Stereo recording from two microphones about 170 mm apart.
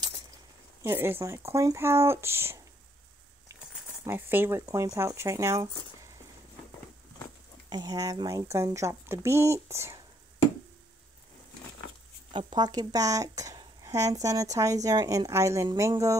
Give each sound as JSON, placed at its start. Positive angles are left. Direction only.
{"t": 0.8, "sound": "a woman's voice", "side_deg": -15}
{"t": 4.0, "sound": "a woman's voice", "side_deg": -10}
{"t": 7.7, "sound": "a woman's voice", "side_deg": -20}
{"t": 12.3, "sound": "speech", "side_deg": -30}